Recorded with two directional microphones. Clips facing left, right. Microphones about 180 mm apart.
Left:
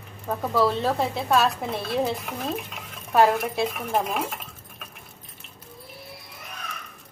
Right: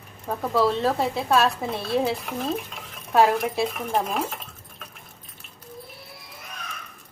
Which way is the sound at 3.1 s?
Centre (ahead or behind).